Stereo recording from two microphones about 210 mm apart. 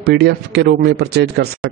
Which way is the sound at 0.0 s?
50° right (ahead or behind).